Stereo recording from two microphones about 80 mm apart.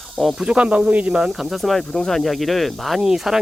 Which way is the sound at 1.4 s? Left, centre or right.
Centre.